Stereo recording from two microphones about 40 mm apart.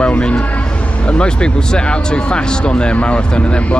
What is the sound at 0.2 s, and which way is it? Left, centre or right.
A man's voice, left.